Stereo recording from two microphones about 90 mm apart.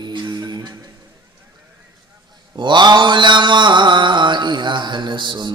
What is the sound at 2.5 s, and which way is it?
Mantra, 60° right (ahead or behind).